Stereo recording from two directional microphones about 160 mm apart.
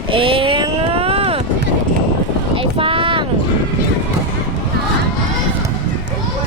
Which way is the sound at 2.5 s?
35° right (ahead or behind).